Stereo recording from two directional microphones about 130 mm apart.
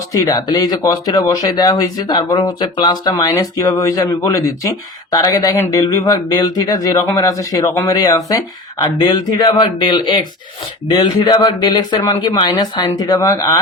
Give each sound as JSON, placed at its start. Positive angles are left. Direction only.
{"t": 0.1, "sound": "speech", "side_deg": 25}